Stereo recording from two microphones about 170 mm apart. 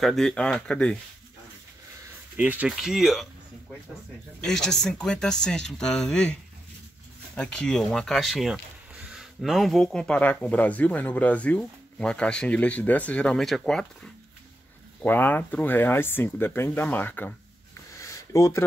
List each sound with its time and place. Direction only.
0.0 s speech: 5° left (ahead or behind)
2.3 s speech: 10° right (ahead or behind)
4.4 s speech: 5° left (ahead or behind)
7.3 s speech: 5° left (ahead or behind)
17.9 s a sound: 20° left (ahead or behind)